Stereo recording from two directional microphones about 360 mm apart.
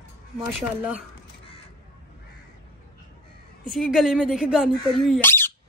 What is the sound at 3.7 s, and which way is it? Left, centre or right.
Speech, centre.